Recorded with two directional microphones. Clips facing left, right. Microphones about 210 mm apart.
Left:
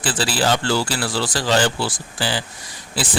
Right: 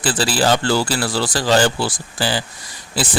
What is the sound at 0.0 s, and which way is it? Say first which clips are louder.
A man's voice: right 3 dB; 40° right (ahead or behind).